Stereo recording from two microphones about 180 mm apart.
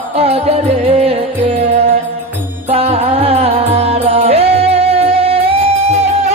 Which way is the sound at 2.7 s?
35° right (ahead or behind).